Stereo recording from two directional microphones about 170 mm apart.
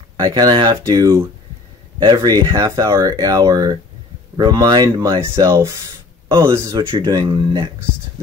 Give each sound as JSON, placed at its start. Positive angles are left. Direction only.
{"t": 0.2, "sound": "speech", "side_deg": -25}